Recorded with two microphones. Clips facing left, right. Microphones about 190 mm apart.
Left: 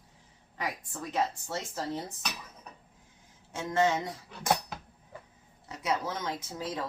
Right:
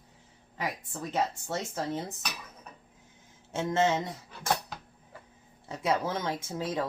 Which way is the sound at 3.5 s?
25° right (ahead or behind).